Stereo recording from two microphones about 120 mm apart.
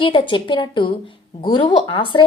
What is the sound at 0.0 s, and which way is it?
A woman's voice, 45° left (ahead or behind).